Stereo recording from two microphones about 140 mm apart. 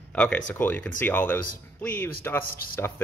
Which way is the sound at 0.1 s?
10° left (ahead or behind).